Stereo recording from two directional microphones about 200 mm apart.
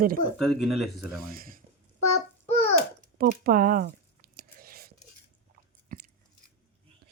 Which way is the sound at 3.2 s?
45° right (ahead or behind).